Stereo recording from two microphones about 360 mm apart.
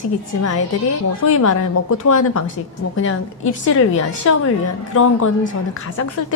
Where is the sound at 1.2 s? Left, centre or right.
Left.